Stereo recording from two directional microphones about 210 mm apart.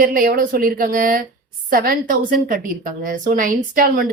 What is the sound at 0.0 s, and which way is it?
A woman's voice, 45° right (ahead or behind).